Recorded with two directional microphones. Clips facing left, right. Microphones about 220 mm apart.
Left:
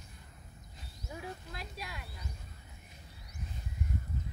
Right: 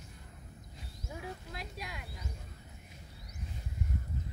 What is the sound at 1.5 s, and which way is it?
Speech, 15° right (ahead or behind).